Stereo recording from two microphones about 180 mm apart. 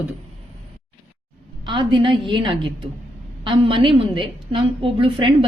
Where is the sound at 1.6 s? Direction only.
25° right (ahead or behind).